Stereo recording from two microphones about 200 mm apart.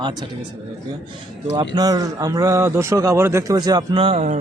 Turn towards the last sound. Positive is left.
turn(degrees=-30)  # may be behind; listen again after turning